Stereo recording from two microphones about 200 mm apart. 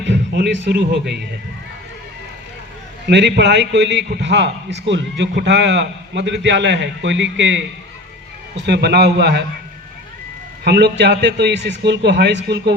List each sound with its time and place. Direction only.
0.0 s a man's voice: 60° right (ahead or behind)
3.1 s a man's voice: 60° right (ahead or behind)
10.6 s a man's voice: 55° right (ahead or behind)